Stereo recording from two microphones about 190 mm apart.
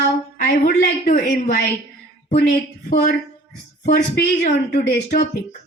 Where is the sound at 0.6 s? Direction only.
45° left (ahead or behind).